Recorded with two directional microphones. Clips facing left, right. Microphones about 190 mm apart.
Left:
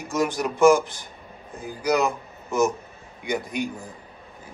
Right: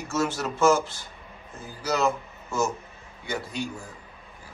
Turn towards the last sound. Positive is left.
turn(degrees=15)  # may be behind; listen again after turning